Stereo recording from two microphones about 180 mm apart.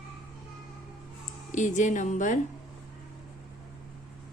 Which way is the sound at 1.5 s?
45° left (ahead or behind).